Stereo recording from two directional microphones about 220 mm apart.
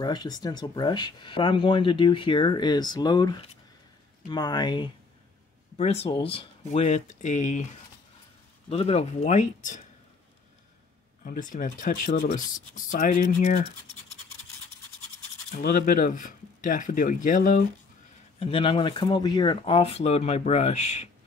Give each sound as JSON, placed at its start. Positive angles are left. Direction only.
{"t": 0.0, "sound": "speech", "side_deg": 20}
{"t": 8.6, "sound": "speech", "side_deg": 25}
{"t": 11.2, "sound": "speech", "side_deg": 35}
{"t": 15.5, "sound": "speech", "side_deg": 40}
{"t": 18.4, "sound": "speech", "side_deg": 25}